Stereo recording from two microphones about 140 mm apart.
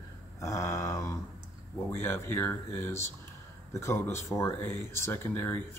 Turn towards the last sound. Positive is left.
turn(degrees=15)  # may be behind; listen again after turning